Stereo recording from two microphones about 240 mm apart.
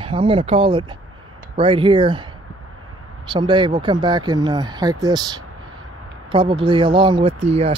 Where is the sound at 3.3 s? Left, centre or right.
Centre.